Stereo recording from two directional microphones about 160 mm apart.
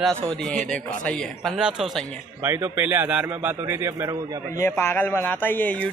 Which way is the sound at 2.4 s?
15° right (ahead or behind).